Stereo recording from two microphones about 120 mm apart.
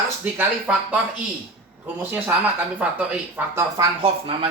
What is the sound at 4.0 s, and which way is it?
Speech, 50° right (ahead or behind).